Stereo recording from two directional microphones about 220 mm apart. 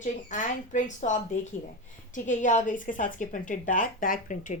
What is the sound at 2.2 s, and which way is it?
A woman's voice, 35° left (ahead or behind).